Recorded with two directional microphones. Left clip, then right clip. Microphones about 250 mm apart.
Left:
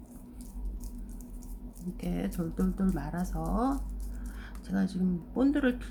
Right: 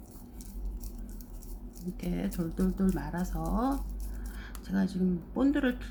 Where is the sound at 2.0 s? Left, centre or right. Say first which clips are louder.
Even; centre.